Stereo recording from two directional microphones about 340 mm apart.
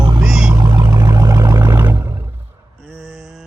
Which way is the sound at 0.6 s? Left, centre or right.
Centre.